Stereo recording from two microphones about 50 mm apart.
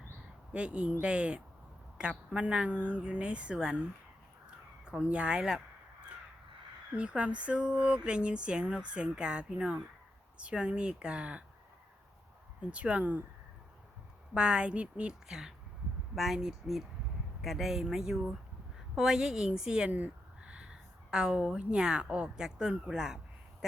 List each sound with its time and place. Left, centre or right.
0.5 s speech: right
5.0 s speech: right
6.9 s speech: right
12.7 s speech: right
14.3 s speech: right
15.3 s speech: centre
22.9 s a sound: centre